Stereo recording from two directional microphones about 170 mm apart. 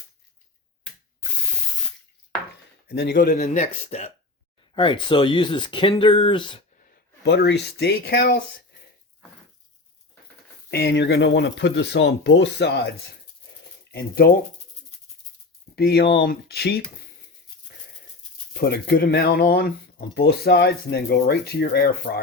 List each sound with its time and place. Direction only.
2.8 s a man's voice: 70° left (ahead or behind)
3.2 s speech: 45° left (ahead or behind)
4.7 s speech: 30° left (ahead or behind)
7.3 s speech: 80° left
10.7 s speech: 70° left (ahead or behind); by 12.9 s 90° left
13.9 s speech: 65° left (ahead or behind)
15.7 s speech: 70° left (ahead or behind)
18.6 s speech: 65° left (ahead or behind)